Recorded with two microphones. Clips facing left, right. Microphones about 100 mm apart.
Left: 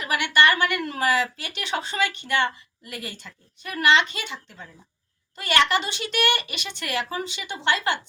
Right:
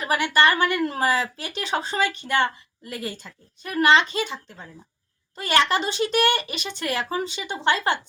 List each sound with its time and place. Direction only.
0.0 s a woman's voice: 35° right (ahead or behind)